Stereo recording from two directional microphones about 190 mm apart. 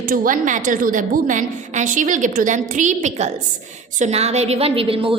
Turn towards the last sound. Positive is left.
turn(degrees=-30)  # may be behind; listen again after turning